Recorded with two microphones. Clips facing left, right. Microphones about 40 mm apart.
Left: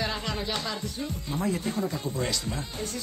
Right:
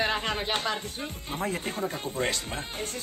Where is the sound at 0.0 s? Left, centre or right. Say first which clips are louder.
Right 3 dB; right.